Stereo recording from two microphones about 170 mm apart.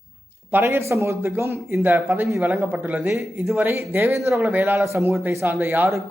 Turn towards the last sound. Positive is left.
turn(degrees=-15)  # may be behind; listen again after turning